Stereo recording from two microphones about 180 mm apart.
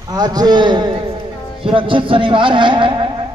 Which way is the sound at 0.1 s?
20° right (ahead or behind).